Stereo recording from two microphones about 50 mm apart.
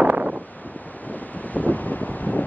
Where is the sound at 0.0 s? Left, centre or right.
Right.